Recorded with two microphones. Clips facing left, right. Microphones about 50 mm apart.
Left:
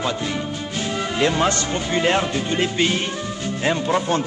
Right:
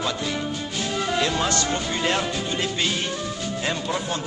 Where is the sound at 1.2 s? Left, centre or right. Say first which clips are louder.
Left 7 dB; left.